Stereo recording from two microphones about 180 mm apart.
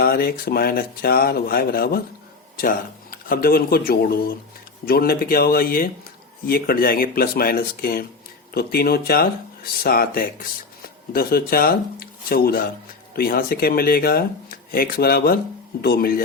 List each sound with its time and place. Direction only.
0.0 s a man's voice: 55° left (ahead or behind)